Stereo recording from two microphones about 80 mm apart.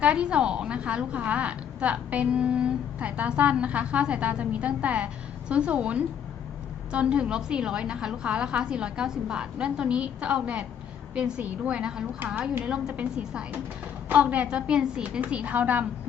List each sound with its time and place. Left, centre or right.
0.0 s a woman's voice: centre